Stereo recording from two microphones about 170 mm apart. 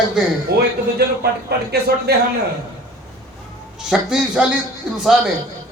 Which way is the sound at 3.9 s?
5° right (ahead or behind).